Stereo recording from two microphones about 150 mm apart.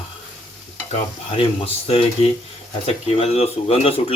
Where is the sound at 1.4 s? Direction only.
40° left (ahead or behind).